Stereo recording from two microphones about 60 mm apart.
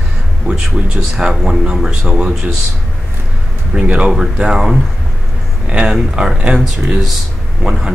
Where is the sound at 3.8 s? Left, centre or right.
Centre.